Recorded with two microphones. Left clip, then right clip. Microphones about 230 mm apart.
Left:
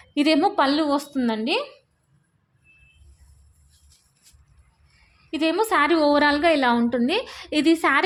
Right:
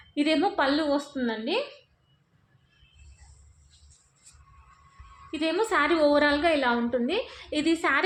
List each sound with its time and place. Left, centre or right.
0.1 s a woman's voice: left
5.3 s a woman's voice: left